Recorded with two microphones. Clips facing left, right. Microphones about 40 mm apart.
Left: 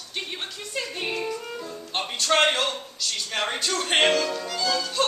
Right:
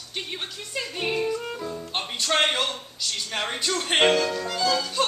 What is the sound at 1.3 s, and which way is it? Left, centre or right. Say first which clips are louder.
Speech: right 3 dB; centre.